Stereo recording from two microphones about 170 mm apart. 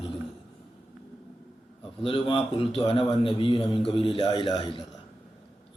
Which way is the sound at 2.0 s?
30° left (ahead or behind).